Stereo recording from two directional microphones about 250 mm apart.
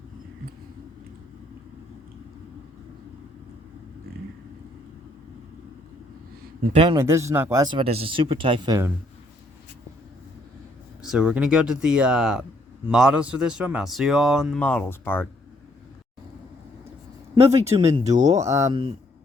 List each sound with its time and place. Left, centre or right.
6.7 s speech: centre
11.0 s speech: centre
17.7 s speech: centre